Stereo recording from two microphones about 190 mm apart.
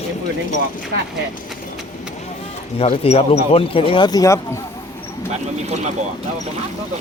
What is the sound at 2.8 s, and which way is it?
Speech, 30° left (ahead or behind).